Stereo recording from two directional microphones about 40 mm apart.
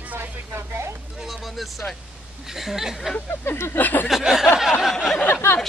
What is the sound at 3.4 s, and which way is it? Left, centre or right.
Speech, left.